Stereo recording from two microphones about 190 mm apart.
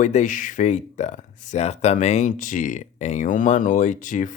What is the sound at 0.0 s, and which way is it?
Speech, 40° left (ahead or behind).